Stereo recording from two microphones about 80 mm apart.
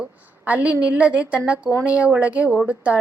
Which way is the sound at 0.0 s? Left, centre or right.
Centre.